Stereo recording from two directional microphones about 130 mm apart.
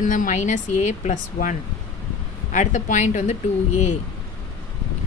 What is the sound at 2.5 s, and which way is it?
A woman's voice, 70° left (ahead or behind).